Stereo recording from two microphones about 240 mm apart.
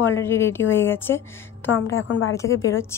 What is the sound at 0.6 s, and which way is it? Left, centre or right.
Speech, left.